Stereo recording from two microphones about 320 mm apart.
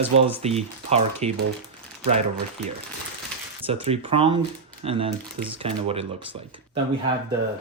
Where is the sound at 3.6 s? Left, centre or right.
Centre.